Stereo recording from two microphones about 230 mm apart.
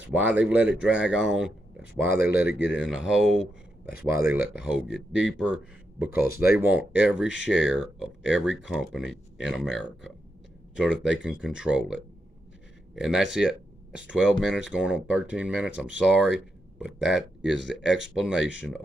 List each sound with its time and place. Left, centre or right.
0.0 s speech: centre
2.3 s speech: left
2.7 s speech: centre
4.6 s speech: centre
6.0 s speech: left
6.5 s speech: centre